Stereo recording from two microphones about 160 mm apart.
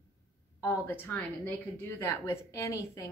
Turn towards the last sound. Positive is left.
turn(degrees=15)  # may be behind; listen again after turning